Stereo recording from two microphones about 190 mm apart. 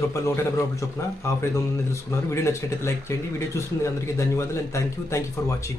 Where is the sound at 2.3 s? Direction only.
15° left (ahead or behind).